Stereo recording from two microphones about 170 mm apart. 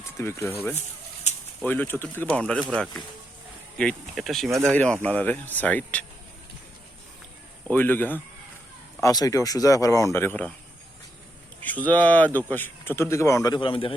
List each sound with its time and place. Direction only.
0.0 s speech: 15° left (ahead or behind)
1.3 s bird: 45° left (ahead or behind)
1.6 s speech: 10° left (ahead or behind)
7.7 s speech: 10° left (ahead or behind)
11.6 s speech: 10° left (ahead or behind); by 13.9 s 30° left (ahead or behind)